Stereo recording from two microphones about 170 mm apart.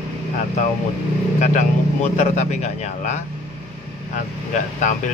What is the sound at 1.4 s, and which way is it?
A man's voice, 45° left (ahead or behind).